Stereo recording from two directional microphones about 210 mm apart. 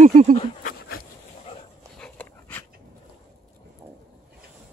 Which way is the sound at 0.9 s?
45° left (ahead or behind).